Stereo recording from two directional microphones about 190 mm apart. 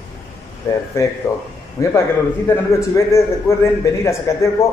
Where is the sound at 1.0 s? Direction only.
15° left (ahead or behind).